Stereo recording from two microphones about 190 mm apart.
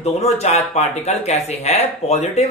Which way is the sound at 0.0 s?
35° left (ahead or behind).